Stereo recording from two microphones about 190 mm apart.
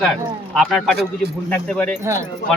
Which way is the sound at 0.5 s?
Centre (ahead or behind).